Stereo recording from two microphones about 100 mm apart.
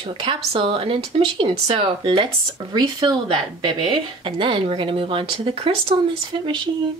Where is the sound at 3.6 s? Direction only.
60° right (ahead or behind).